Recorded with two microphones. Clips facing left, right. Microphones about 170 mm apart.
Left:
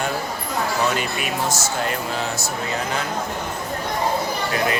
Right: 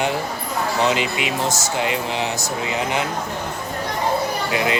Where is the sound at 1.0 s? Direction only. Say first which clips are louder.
Right 3 dB; 90° right.